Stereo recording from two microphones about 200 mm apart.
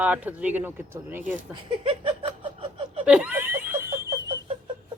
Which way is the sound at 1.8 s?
25° right (ahead or behind).